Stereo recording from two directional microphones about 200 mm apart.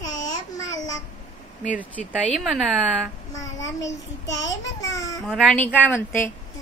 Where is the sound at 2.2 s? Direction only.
Centre (ahead or behind).